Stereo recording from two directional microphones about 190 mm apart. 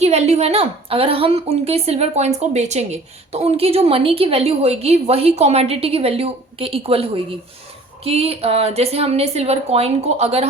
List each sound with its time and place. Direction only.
0.0 s a woman's voice: 35° right (ahead or behind)